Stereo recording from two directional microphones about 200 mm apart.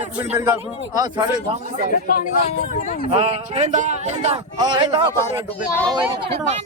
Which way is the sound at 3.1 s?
30° right (ahead or behind).